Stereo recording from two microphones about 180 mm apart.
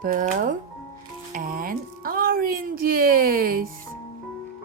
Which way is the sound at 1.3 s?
50° right (ahead or behind).